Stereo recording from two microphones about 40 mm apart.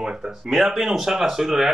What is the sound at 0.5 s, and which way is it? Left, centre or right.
Speech, centre.